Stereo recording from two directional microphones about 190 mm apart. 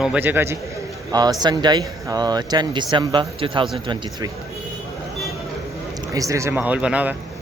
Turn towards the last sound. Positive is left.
turn(degrees=-5)  # may be behind; listen again after turning